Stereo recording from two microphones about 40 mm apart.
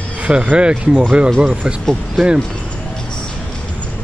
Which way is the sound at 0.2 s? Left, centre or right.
Right.